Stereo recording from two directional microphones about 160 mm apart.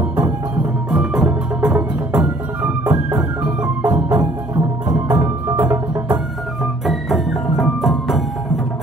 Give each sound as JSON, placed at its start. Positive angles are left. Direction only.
{"t": 0.9, "sound": "music", "side_deg": -5}
{"t": 2.8, "sound": "music", "side_deg": -20}
{"t": 3.2, "sound": "music", "side_deg": -5}
{"t": 4.1, "sound": "music", "side_deg": -25}
{"t": 6.6, "sound": "music", "side_deg": 0}